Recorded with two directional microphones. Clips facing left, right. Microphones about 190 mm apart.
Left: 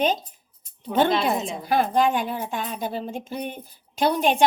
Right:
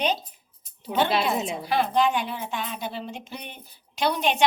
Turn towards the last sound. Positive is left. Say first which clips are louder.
# left 4 dB
turn(degrees=45)  # may be behind; listen again after turning